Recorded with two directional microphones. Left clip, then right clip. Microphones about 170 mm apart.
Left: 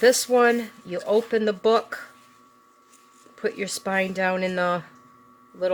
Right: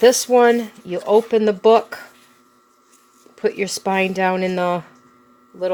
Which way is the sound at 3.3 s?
25° right (ahead or behind).